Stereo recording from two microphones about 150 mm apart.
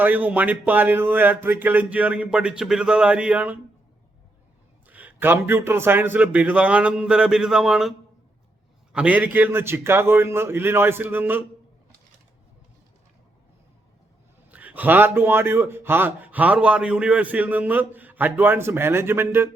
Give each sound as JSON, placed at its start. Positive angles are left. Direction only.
{"t": 0.0, "sound": "a man's voice", "side_deg": -10}
{"t": 4.9, "sound": "a man's voice", "side_deg": -10}
{"t": 14.5, "sound": "a man's voice", "side_deg": -10}